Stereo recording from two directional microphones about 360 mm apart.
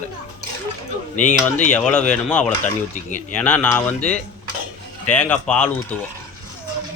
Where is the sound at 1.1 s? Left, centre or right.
Left.